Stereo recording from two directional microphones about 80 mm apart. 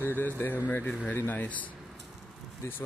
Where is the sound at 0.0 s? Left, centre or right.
Left.